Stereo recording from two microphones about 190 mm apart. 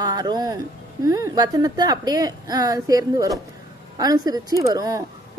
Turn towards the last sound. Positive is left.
turn(degrees=-20)  # may be behind; listen again after turning